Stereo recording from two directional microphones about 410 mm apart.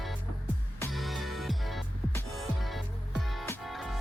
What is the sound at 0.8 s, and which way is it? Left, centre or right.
Music, centre.